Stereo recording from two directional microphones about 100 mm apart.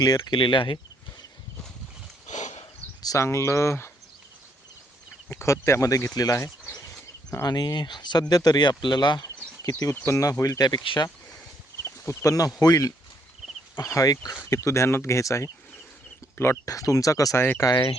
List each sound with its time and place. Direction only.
0.0 s speech: 40° left (ahead or behind)
0.3 s speech: 60° left (ahead or behind)
3.0 s speech: 30° left (ahead or behind)
5.3 s speech: 30° left (ahead or behind); by 9.8 s 45° left (ahead or behind)
10.1 s speech: 30° left (ahead or behind)
10.8 s speech: 55° left (ahead or behind)
11.9 s speech: 30° left (ahead or behind)